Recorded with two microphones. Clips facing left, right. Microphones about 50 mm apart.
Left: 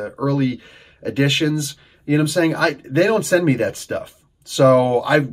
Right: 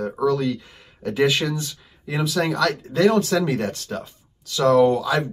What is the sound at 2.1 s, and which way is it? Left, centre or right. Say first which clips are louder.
Speech: left 6 dB; centre.